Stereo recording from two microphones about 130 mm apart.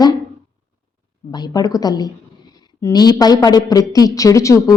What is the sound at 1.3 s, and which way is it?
A woman's voice, 30° left (ahead or behind).